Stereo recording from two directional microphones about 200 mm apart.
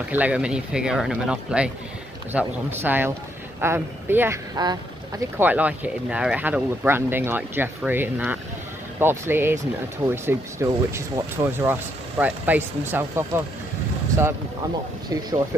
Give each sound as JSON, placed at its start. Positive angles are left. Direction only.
{"t": 0.1, "sound": "speech", "side_deg": -5}
{"t": 5.4, "sound": "speech", "side_deg": -10}
{"t": 15.0, "sound": "speech", "side_deg": -20}